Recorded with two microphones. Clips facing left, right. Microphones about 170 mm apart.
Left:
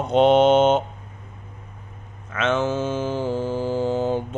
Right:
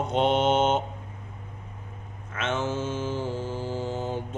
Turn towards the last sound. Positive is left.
turn(degrees=85)